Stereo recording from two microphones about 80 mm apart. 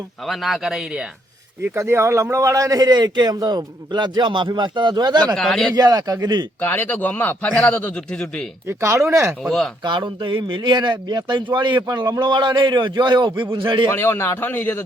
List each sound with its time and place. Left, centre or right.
0.3 s speech: centre
1.7 s a man's voice: right
5.4 s speech: centre
5.7 s a man's voice: right
6.6 s a man's voice: left
8.8 s speech: right
9.4 s speech: centre
9.8 s a man's voice: right
11.8 s a man's voice: right
13.9 s speech: left